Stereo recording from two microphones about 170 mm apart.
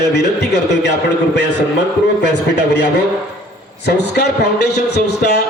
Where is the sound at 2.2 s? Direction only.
85° left.